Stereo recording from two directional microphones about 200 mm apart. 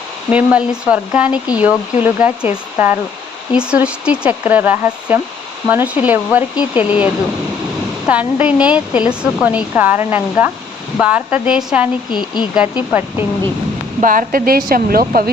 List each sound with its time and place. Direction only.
0.3 s a woman's voice: 5° right (ahead or behind)
12.1 s speech: 20° left (ahead or behind)
12.9 s a woman's voice: 10° right (ahead or behind)
14.0 s a woman's voice: 40° right (ahead or behind)